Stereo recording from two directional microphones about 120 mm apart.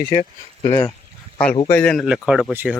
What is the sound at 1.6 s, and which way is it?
Speech, 15° left (ahead or behind).